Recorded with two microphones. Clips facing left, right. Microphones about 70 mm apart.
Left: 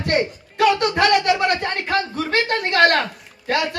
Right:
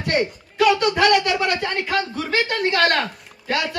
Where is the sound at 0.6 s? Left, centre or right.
Left.